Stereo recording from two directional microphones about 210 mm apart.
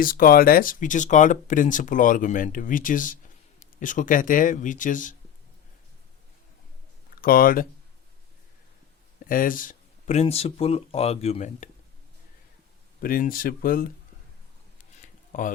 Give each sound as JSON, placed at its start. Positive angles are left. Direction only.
{"t": 0.0, "sound": "speech", "side_deg": 45}
{"t": 7.2, "sound": "speech", "side_deg": 45}
{"t": 9.2, "sound": "speech", "side_deg": 40}
{"t": 13.0, "sound": "speech", "side_deg": 45}
{"t": 15.0, "sound": "a sound", "side_deg": 40}